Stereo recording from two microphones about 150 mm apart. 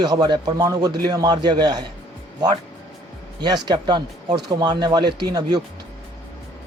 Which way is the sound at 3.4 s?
30° right (ahead or behind).